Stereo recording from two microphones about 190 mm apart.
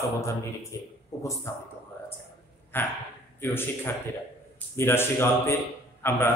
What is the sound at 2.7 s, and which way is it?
A man's voice, 10° left (ahead or behind).